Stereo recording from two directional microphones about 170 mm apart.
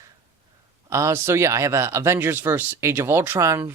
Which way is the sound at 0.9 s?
15° right (ahead or behind).